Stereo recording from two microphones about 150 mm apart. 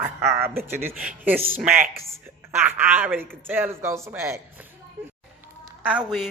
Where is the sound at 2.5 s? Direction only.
15° right (ahead or behind).